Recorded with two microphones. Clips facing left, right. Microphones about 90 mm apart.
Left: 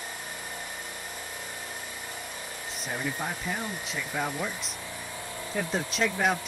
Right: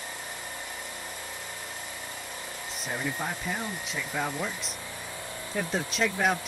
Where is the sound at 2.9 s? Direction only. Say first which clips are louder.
Even; 15° right (ahead or behind).